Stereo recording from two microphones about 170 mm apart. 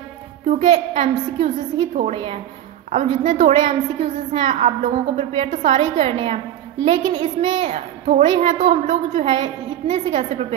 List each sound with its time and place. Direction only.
0.5 s a woman's voice: 40° right (ahead or behind)
2.9 s a woman's voice: 45° right (ahead or behind); by 7.7 s 25° right (ahead or behind)
7.7 s a woman's voice: 40° right (ahead or behind)